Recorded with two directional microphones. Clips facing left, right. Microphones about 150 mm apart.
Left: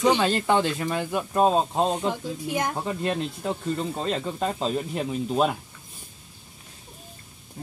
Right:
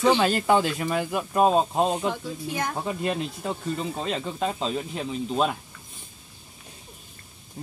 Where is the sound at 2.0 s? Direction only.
15° left (ahead or behind).